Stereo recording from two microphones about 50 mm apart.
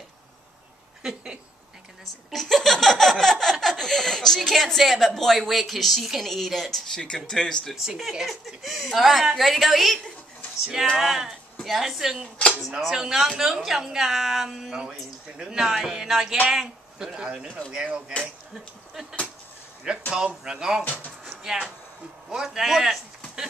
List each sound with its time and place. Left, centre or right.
1.0 s speech: centre
2.3 s laughter: centre
3.6 s a woman's voice: centre
7.2 s laughter: centre
7.7 s a woman's voice: centre
11.0 s speech: centre; by 18.1 s right
18.2 s speech: centre
20.8 s speech: left
21.4 s speech: centre